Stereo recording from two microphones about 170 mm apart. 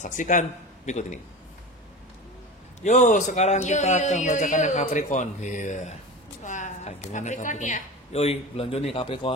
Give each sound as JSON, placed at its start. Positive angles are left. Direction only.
{"t": 0.0, "sound": "a man's voice", "side_deg": 50}
{"t": 2.8, "sound": "a man's voice", "side_deg": 45}